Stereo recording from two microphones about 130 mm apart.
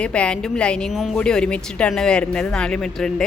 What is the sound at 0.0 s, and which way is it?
Speech, 10° left (ahead or behind).